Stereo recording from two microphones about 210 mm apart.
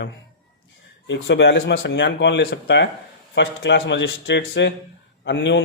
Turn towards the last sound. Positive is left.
turn(degrees=55)  # may be behind; listen again after turning